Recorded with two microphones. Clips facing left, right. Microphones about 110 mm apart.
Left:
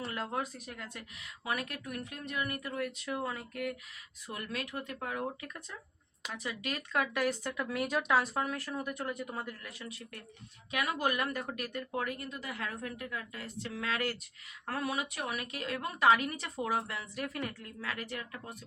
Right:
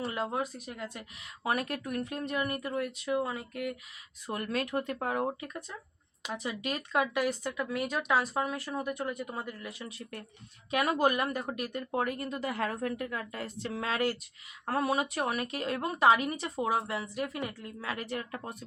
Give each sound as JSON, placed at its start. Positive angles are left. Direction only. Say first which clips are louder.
{"t": 0.0, "sound": "speech", "louder": "right 4 dB", "side_deg": -15}
{"t": 1.5, "sound": "speech", "louder": "right 5 dB", "side_deg": -35}
{"t": 4.3, "sound": "speech", "louder": "right 7 dB", "side_deg": -45}
{"t": 6.3, "sound": "speech", "louder": "right 4 dB", "side_deg": -20}
{"t": 7.1, "sound": "speech", "louder": "right 2 dB", "side_deg": -5}
{"t": 8.9, "sound": "speech", "louder": "right 3 dB", "side_deg": -5}
{"t": 10.7, "sound": "speech", "louder": "right 5 dB", "side_deg": -35}
{"t": 11.9, "sound": "a woman's voice", "louder": "right 6 dB", "side_deg": -40}